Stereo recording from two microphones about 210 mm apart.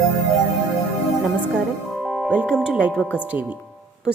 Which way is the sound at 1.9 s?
Centre (ahead or behind).